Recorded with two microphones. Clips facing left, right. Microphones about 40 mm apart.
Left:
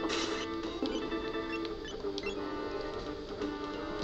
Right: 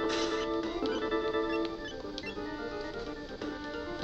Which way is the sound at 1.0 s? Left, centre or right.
Right.